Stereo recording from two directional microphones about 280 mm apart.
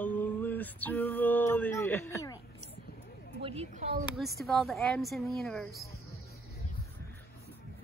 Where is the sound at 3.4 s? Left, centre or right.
Right.